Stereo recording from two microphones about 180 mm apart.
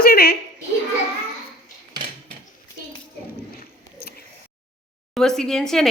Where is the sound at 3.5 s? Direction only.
60° left (ahead or behind).